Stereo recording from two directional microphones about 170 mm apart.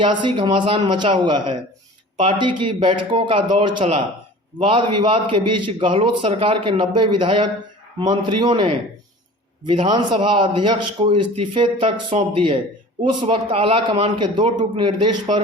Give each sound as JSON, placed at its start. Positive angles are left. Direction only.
{"t": 0.0, "sound": "a man's voice", "side_deg": -30}